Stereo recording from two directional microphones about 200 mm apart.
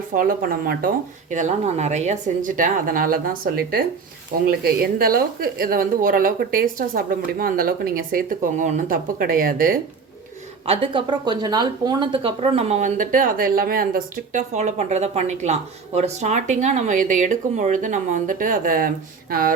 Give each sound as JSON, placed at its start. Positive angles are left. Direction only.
{"t": 0.1, "sound": "a woman's voice", "side_deg": -45}
{"t": 10.7, "sound": "speech", "side_deg": -25}